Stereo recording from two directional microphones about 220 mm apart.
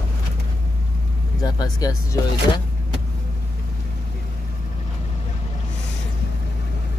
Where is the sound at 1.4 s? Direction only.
15° left (ahead or behind).